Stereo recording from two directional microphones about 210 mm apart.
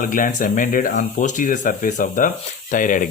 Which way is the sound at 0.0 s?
40° left (ahead or behind).